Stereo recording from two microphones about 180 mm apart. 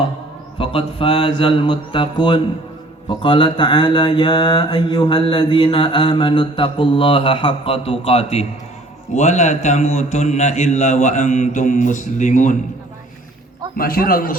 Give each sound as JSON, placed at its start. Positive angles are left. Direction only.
{"t": 0.6, "sound": "mantra", "side_deg": 30}
{"t": 13.7, "sound": "a man's voice", "side_deg": 55}